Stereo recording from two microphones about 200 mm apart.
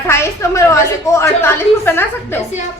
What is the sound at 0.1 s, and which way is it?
A woman's voice, 15° left (ahead or behind).